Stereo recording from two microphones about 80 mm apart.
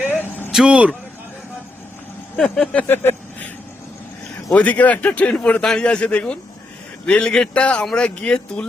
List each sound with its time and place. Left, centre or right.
0.2 s vehicle: left
0.5 s speech: centre
2.3 s speech: centre
2.8 s vehicle: left
4.5 s speech: centre